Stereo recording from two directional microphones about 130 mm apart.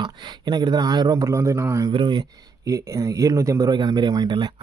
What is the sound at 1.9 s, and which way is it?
Speech, 40° right (ahead or behind).